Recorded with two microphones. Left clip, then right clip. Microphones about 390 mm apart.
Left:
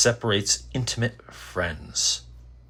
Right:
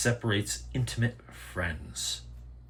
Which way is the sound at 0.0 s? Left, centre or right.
Centre.